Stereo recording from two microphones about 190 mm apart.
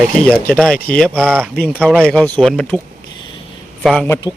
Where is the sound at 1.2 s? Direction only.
10° right (ahead or behind).